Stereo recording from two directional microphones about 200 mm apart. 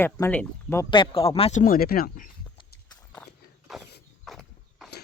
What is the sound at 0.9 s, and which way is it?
Speech, 25° left (ahead or behind).